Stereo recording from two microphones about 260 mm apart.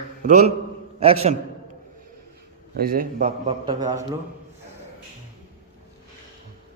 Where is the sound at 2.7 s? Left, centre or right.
Right; by 4.0 s centre.